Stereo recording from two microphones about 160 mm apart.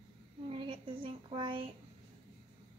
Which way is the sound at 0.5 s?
30° right (ahead or behind).